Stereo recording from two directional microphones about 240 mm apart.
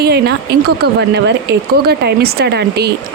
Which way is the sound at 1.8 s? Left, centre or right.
Right.